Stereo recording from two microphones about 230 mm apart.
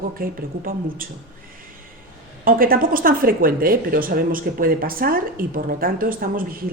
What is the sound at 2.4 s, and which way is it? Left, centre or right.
Speech, right.